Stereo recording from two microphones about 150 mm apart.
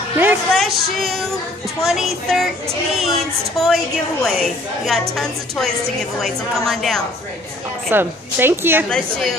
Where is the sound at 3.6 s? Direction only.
Centre (ahead or behind).